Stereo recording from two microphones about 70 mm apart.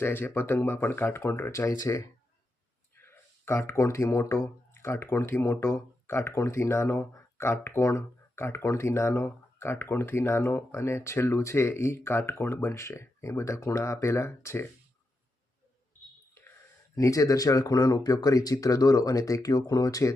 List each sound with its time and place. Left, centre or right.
0.0 s speech: left
2.9 s speech: left
16.9 s speech: left